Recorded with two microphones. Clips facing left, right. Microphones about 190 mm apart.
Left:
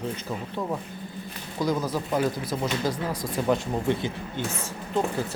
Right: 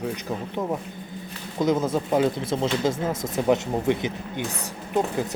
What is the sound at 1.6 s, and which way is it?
Speech, 25° right (ahead or behind).